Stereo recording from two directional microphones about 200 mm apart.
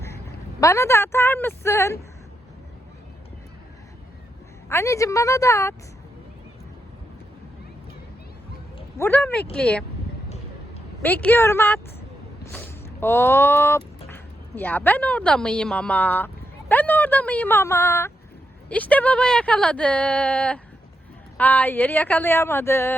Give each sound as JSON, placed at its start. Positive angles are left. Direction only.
{"t": 0.6, "sound": "speech", "side_deg": 15}
{"t": 4.7, "sound": "speech", "side_deg": 15}
{"t": 9.0, "sound": "speech", "side_deg": 10}
{"t": 11.0, "sound": "speech", "side_deg": 10}
{"t": 12.8, "sound": "a woman's voice", "side_deg": 10}